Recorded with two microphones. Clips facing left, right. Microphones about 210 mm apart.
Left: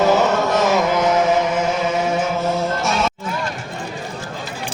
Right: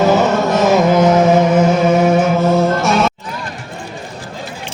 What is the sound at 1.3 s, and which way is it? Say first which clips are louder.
Music: right 7 dB; 55° right (ahead or behind).